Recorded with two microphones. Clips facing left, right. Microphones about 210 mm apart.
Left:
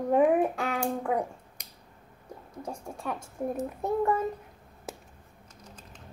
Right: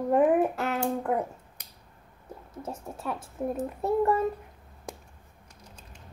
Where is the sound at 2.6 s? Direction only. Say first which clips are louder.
Right 1 dB; 5° right (ahead or behind).